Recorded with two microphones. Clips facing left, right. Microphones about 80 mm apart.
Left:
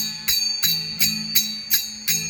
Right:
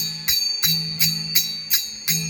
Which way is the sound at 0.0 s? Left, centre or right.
Centre.